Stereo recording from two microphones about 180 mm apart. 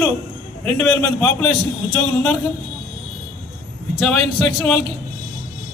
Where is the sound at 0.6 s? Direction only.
10° left (ahead or behind).